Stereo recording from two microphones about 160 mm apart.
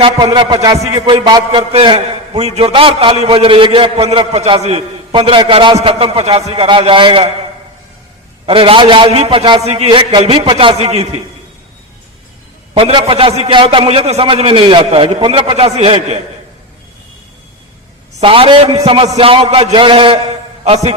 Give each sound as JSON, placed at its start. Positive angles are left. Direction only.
{"t": 0.0, "sound": "music", "side_deg": -30}
{"t": 1.7, "sound": "a man's voice", "side_deg": -35}
{"t": 8.4, "sound": "a man's voice", "side_deg": -35}
{"t": 12.7, "sound": "a man's voice", "side_deg": -35}
{"t": 18.2, "sound": "a man's voice", "side_deg": -35}
{"t": 20.7, "sound": "a man's voice", "side_deg": -45}